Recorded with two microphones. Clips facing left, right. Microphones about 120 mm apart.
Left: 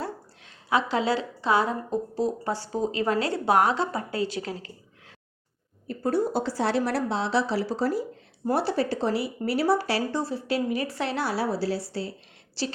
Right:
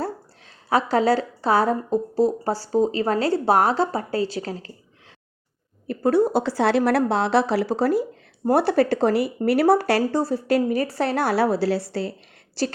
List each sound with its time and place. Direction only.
0.0 s a woman's voice: 40° right (ahead or behind)
5.9 s speech: 70° right (ahead or behind)
12.6 s a woman's voice: 50° right (ahead or behind)